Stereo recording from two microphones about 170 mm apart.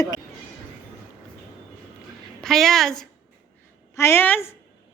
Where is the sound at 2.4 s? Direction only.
Centre (ahead or behind).